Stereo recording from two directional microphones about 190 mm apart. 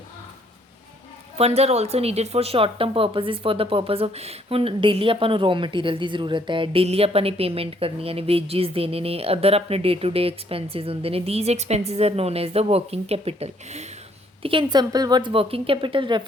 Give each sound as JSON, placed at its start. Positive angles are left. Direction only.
{"t": 1.4, "sound": "a woman's voice", "side_deg": -35}